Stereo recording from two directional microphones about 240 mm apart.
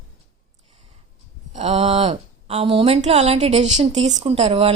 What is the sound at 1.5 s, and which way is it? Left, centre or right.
Speech, right.